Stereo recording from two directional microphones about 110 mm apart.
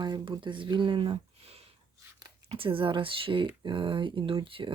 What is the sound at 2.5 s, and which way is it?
Speech, 55° right (ahead or behind).